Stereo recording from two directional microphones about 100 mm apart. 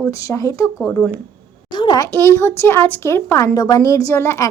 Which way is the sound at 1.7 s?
50° left (ahead or behind).